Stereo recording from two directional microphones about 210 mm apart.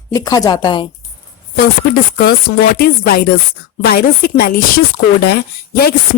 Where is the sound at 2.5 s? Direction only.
45° left (ahead or behind).